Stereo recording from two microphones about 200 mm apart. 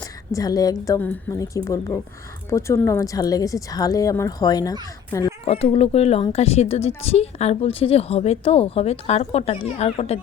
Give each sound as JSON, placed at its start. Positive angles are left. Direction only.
{"t": 0.3, "sound": "speech", "side_deg": 20}
{"t": 5.5, "sound": "a woman's voice", "side_deg": 30}